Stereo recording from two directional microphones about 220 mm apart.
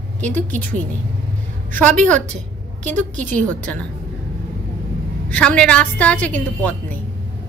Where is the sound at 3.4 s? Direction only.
5° left (ahead or behind).